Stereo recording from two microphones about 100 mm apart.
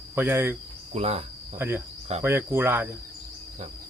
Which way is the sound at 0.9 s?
90° right.